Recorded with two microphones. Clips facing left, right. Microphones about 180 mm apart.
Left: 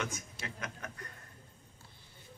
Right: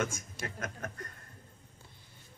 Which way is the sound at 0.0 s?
45° right (ahead or behind).